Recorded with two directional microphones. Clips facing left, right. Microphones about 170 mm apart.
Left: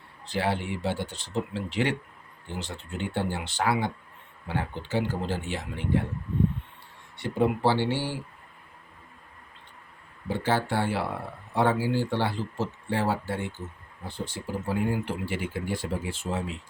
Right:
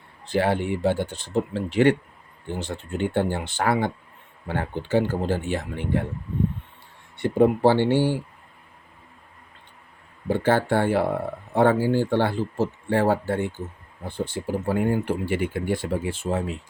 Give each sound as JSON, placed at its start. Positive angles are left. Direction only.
{"t": 0.3, "sound": "speech", "side_deg": -50}
{"t": 7.2, "sound": "speech", "side_deg": -50}
{"t": 10.2, "sound": "speech", "side_deg": -50}